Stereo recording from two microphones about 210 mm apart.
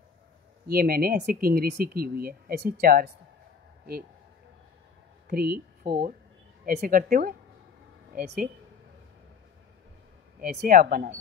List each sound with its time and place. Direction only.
0.7 s speech: 45° right (ahead or behind)
5.3 s speech: 45° right (ahead or behind)
10.4 s speech: 40° right (ahead or behind)